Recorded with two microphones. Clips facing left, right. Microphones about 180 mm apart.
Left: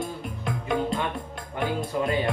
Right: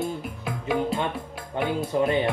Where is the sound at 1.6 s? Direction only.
25° right (ahead or behind).